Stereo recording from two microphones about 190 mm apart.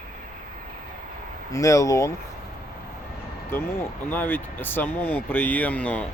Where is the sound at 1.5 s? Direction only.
15° left (ahead or behind).